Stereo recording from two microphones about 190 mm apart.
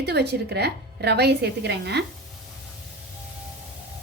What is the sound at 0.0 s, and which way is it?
A woman's voice, 60° right (ahead or behind).